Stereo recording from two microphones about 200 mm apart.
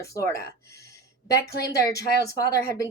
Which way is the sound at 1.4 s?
55° left (ahead or behind).